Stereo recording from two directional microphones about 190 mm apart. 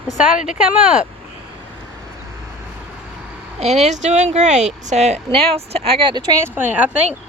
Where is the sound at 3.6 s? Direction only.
35° right (ahead or behind).